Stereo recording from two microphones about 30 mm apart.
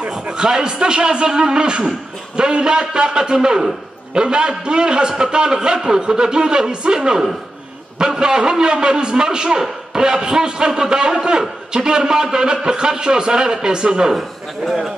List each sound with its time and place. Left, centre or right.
0.1 s speech: right